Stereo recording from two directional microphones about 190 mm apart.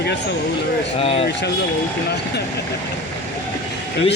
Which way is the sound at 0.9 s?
30° left (ahead or behind).